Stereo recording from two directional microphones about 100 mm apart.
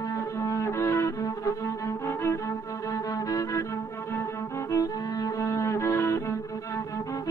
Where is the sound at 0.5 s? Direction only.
30° left (ahead or behind).